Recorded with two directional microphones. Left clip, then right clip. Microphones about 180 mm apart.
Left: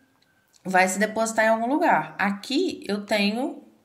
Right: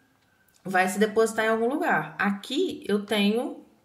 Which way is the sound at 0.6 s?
30° left (ahead or behind).